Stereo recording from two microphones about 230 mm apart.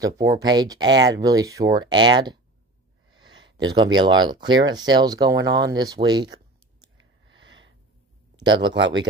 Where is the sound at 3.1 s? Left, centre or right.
Centre.